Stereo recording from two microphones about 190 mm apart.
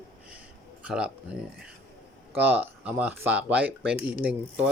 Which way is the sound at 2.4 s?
10° right (ahead or behind).